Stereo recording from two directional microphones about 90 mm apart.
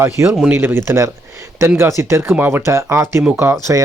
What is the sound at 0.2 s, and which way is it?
Speech, 30° right (ahead or behind).